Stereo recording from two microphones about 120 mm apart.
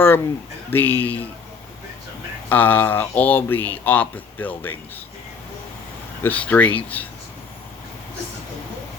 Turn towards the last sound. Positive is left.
turn(degrees=10)  # may be behind; listen again after turning